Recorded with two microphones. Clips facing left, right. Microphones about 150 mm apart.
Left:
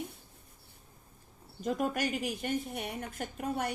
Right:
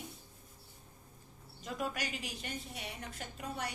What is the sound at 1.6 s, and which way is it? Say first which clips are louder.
A woman's voice: left 7 dB; 50° left (ahead or behind).